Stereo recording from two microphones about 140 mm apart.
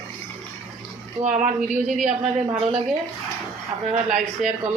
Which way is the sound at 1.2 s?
65° right (ahead or behind).